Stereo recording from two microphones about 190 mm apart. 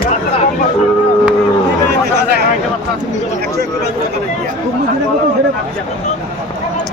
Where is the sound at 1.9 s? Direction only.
60° right (ahead or behind).